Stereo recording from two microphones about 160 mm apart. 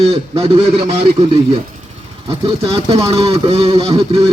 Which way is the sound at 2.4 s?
35° right (ahead or behind).